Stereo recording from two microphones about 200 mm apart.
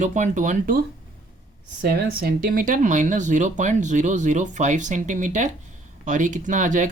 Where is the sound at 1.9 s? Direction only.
50° right (ahead or behind).